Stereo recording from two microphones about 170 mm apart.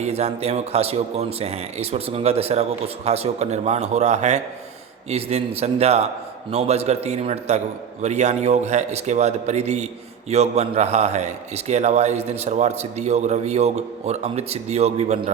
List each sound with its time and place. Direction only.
0.0 s a man's voice: 40° right (ahead or behind)